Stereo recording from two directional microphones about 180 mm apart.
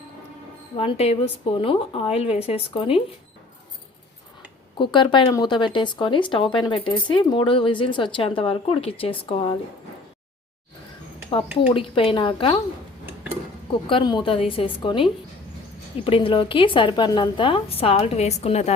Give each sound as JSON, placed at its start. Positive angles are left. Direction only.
{"t": 0.8, "sound": "a woman's voice", "side_deg": 35}
{"t": 4.8, "sound": "speech", "side_deg": 25}
{"t": 11.7, "sound": "speech", "side_deg": 30}
{"t": 13.8, "sound": "speech", "side_deg": 25}